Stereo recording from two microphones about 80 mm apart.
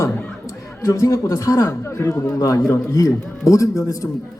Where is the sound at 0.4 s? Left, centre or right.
Left.